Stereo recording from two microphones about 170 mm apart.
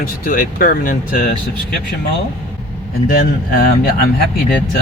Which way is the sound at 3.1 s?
55° left (ahead or behind).